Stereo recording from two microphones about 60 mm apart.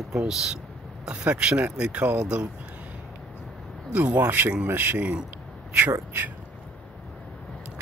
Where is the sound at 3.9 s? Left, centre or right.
Right.